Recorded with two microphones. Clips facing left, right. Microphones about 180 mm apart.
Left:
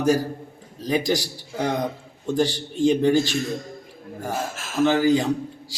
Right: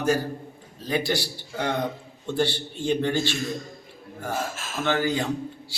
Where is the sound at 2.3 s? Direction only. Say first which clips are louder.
Left 3 dB; 40° left (ahead or behind).